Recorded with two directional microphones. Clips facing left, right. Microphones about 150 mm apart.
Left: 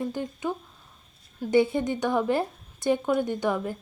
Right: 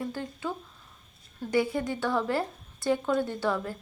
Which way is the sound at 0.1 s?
15° left (ahead or behind).